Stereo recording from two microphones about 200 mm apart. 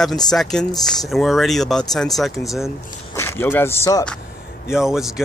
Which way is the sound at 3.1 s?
10° left (ahead or behind).